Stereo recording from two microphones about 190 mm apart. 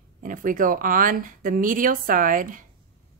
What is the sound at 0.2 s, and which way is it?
Speech, 45° right (ahead or behind).